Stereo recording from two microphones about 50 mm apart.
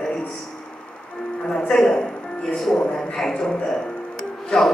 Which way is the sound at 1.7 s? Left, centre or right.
Centre.